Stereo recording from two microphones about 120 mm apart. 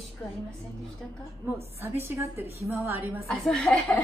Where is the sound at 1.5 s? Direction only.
20° right (ahead or behind).